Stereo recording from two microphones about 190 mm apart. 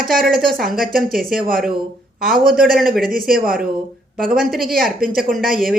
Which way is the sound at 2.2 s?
50° right (ahead or behind).